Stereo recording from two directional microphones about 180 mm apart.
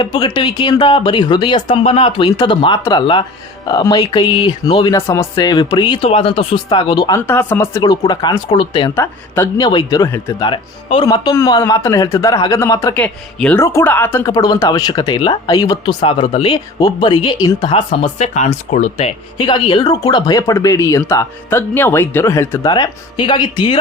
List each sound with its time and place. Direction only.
0.0 s a man's voice: 25° left (ahead or behind)
10.4 s speech: 30° left (ahead or behind)
13.0 s speech: 10° left (ahead or behind); by 23.8 s 25° left (ahead or behind)